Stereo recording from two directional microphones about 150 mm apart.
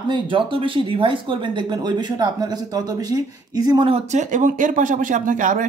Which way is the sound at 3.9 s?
55° right (ahead or behind).